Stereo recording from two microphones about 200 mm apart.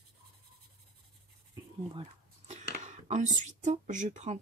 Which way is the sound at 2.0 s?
35° right (ahead or behind).